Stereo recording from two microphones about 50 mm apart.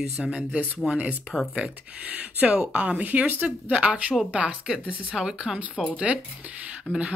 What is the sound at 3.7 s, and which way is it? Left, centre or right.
Speech, right.